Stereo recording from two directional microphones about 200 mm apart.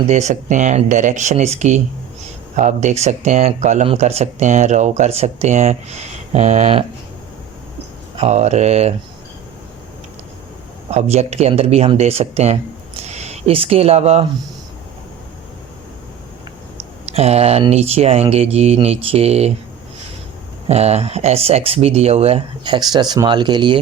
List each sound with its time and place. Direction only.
0.1 s speech: 35° right (ahead or behind)
8.1 s speech: 35° right (ahead or behind)
10.8 s speech: 35° right (ahead or behind)
17.1 s speech: 30° right (ahead or behind)
20.7 s speech: 30° right (ahead or behind)